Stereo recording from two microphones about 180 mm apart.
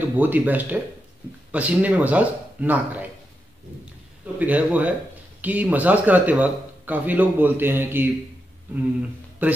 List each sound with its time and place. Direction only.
0.1 s speech: 10° right (ahead or behind)
4.4 s speech: 10° right (ahead or behind)
9.4 s speech: 10° right (ahead or behind)